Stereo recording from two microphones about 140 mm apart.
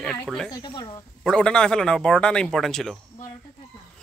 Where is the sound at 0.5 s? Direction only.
30° left (ahead or behind).